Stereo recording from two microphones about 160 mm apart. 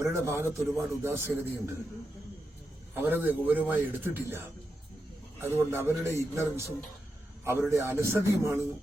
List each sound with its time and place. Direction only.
0.0 s a man's voice: 15° right (ahead or behind)
2.9 s a man's voice: 10° right (ahead or behind)
7.7 s a man's voice: 15° right (ahead or behind)